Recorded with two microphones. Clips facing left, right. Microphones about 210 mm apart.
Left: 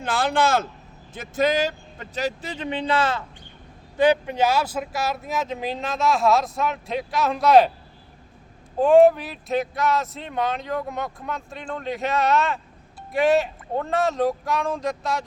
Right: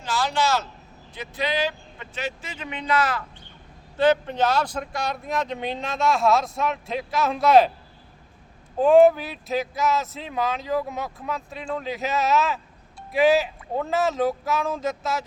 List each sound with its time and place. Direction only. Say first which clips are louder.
0.0 s speech: left 3 dB; 55° left (ahead or behind); by 3.2 s 25° left (ahead or behind)
3.9 s speech: left 1 dB; 15° left (ahead or behind)
8.8 s speech: left 1 dB; centre (ahead or behind)